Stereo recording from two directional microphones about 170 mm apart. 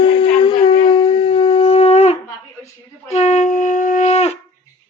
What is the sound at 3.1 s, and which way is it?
Wind instrument, 45° left (ahead or behind).